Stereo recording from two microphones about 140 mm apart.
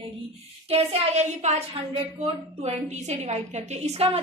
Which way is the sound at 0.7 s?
50° right (ahead or behind).